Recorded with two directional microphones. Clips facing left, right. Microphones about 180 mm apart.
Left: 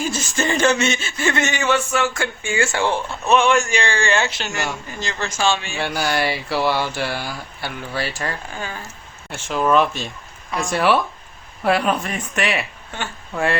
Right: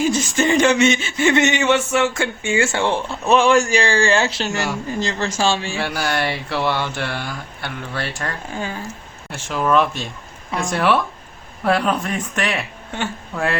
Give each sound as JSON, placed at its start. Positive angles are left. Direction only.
{"t": 0.1, "sound": "speech", "side_deg": -15}
{"t": 3.3, "sound": "speech", "side_deg": -35}
{"t": 5.7, "sound": "speech", "side_deg": 0}
{"t": 9.3, "sound": "speech", "side_deg": 0}